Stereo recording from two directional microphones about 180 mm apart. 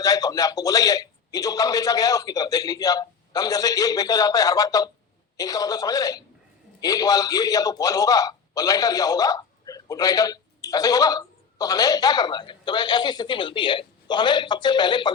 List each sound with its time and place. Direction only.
0.0 s a man's voice: 20° left (ahead or behind)